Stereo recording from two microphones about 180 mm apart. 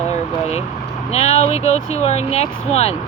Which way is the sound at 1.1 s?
35° left (ahead or behind).